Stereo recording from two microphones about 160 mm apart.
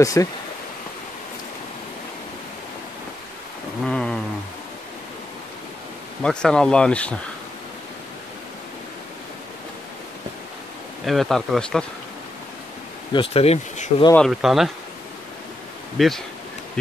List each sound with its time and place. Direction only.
0.0 s speech: 20° left (ahead or behind)
3.8 s a sound: 5° left (ahead or behind)
6.2 s speech: 5° left (ahead or behind)
11.1 s speech: centre (ahead or behind)
13.1 s speech: 35° left (ahead or behind)
14.1 s speech: centre (ahead or behind)
16.0 s speech: centre (ahead or behind)